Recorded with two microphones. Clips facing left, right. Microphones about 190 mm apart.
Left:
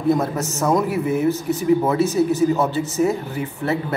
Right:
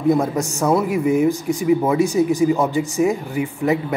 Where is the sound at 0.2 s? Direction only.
15° right (ahead or behind).